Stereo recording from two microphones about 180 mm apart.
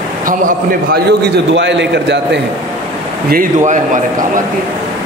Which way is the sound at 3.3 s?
45° right (ahead or behind).